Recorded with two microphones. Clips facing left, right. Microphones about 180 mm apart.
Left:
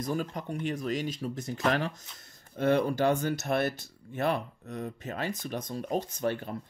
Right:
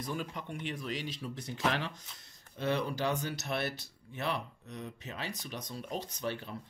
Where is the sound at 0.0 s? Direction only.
45° left (ahead or behind).